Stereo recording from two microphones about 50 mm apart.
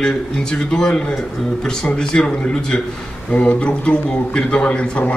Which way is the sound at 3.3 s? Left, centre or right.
Left.